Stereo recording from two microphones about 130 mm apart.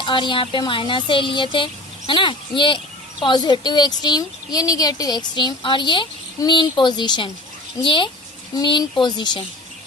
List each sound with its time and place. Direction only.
0.0 s a woman's voice: 40° left (ahead or behind)